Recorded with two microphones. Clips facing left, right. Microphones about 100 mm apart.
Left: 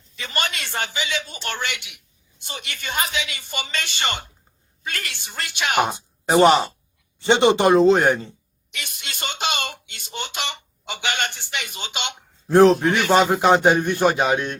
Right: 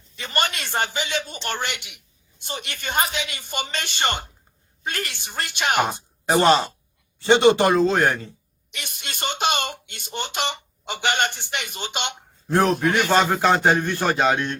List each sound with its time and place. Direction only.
0.2 s a woman's voice: 45° right (ahead or behind)
5.8 s speech: 15° left (ahead or behind)
8.9 s speech: 50° right (ahead or behind)
12.5 s speech: 30° left (ahead or behind)
13.1 s a man's voice: 15° left (ahead or behind)